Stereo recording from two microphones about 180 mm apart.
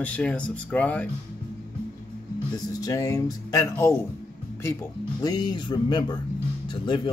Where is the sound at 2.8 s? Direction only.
15° left (ahead or behind).